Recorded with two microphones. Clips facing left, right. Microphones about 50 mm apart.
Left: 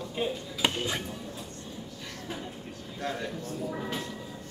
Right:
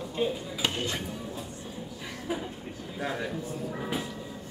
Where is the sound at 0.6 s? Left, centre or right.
Centre.